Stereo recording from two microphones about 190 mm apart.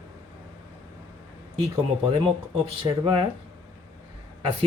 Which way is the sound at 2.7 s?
25° right (ahead or behind).